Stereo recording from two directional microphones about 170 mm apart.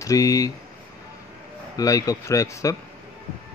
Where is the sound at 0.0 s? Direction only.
20° left (ahead or behind).